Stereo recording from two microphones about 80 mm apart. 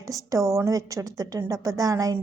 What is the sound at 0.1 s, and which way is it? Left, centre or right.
Speech, right.